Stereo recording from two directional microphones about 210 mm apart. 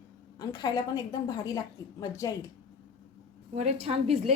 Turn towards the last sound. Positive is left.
turn(degrees=-30)  # may be behind; listen again after turning